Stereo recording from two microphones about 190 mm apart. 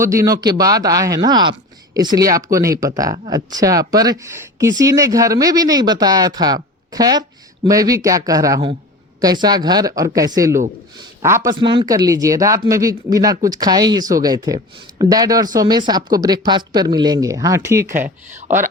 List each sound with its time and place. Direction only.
0.0 s speech: 15° right (ahead or behind)
11.6 s speech: 25° right (ahead or behind)